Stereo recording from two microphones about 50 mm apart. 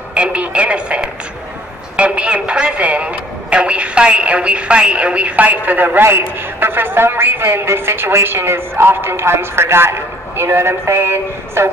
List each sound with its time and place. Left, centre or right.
0.1 s a man's voice: right